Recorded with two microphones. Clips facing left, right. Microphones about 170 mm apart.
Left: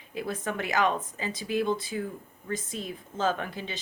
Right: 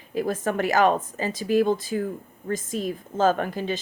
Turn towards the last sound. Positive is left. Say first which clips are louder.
# right 7 dB
turn(degrees=-45)  # may be behind; listen again after turning